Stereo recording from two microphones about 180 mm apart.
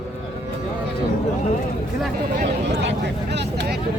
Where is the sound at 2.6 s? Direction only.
75° right (ahead or behind).